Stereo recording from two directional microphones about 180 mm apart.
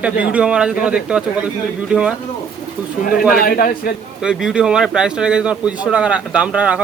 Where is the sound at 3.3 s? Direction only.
55° left (ahead or behind).